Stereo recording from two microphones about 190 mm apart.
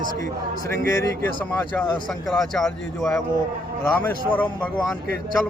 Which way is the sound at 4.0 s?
10° left (ahead or behind).